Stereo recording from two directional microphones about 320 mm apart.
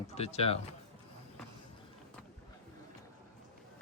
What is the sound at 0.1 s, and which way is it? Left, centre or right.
Speech, centre.